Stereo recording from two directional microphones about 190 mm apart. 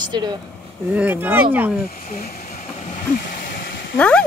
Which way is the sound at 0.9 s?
10° right (ahead or behind).